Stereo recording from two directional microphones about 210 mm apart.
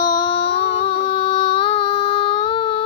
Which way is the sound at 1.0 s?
25° left (ahead or behind).